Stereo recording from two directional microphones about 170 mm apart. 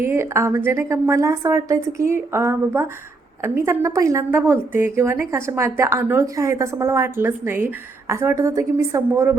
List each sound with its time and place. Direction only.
0.0 s a woman's voice: 15° right (ahead or behind)